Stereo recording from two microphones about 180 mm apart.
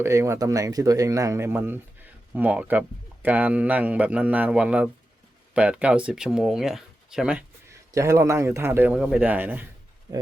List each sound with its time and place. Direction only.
0.0 s a man's voice: 15° right (ahead or behind)
7.7 s a man's voice: 15° right (ahead or behind)